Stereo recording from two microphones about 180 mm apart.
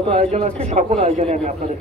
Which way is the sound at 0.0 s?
35° right (ahead or behind).